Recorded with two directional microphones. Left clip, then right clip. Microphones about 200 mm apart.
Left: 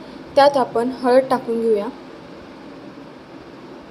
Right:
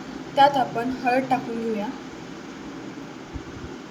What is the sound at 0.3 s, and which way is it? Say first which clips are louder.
A woman's voice: left 4 dB; 25° left (ahead or behind).